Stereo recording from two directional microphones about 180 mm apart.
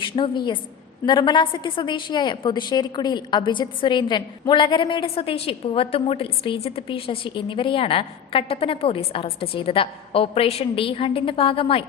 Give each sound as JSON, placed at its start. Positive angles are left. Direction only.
{"t": 0.0, "sound": "a woman's voice", "side_deg": 25}